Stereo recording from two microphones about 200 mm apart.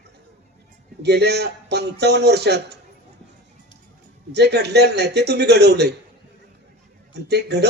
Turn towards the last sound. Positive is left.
turn(degrees=-55)  # may be behind; listen again after turning